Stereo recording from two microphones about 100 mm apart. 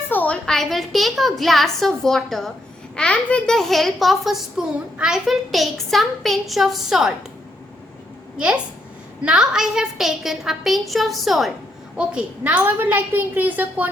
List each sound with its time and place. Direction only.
0.1 s a sound: 15° left (ahead or behind)
0.4 s a child's voice: 5° left (ahead or behind)
9.2 s a child's voice: 10° right (ahead or behind)
11.9 s a woman's voice: 15° right (ahead or behind)